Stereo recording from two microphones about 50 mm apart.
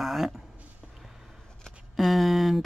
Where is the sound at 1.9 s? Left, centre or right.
Centre.